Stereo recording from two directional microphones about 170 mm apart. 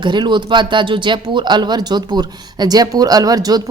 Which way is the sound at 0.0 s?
25° right (ahead or behind).